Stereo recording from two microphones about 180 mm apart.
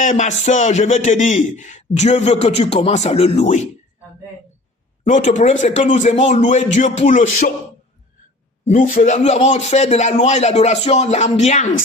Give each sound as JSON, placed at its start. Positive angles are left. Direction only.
{"t": 0.0, "sound": "a man's voice", "side_deg": 45}
{"t": 5.0, "sound": "a man's voice", "side_deg": 40}
{"t": 8.6, "sound": "a man's voice", "side_deg": 45}